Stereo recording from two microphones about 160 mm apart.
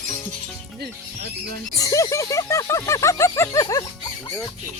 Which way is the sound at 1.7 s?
20° left (ahead or behind).